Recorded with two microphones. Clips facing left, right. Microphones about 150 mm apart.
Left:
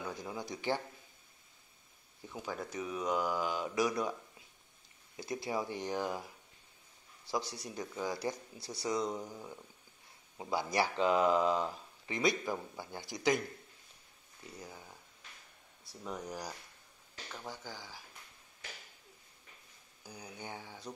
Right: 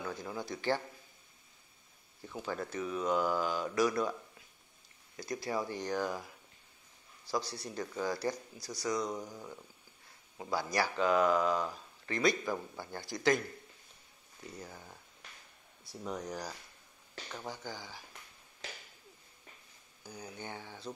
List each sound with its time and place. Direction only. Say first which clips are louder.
0.3 s speech: right 2 dB; 15° left (ahead or behind)
2.3 s speech: right 2 dB; 5° left (ahead or behind)
5.1 s speech: right 1 dB; 20° left (ahead or behind)
7.2 s speech: right 1 dB; 20° left (ahead or behind)
9.1 s speech: right 1 dB; 5° left (ahead or behind)
16.0 s speech: right 2 dB; 5° left (ahead or behind)
17.3 s speech: right 3 dB; 5° right (ahead or behind)
20.1 s speech: right 2 dB; 10° left (ahead or behind)